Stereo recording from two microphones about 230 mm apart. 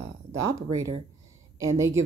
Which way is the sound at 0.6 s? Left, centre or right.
Centre.